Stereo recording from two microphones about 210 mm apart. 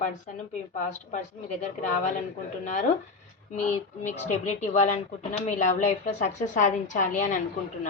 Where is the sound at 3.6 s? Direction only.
35° left (ahead or behind).